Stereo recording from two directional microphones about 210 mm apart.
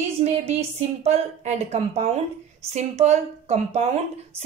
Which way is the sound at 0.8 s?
30° right (ahead or behind).